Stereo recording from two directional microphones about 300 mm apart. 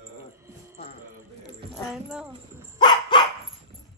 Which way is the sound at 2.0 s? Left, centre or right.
Centre.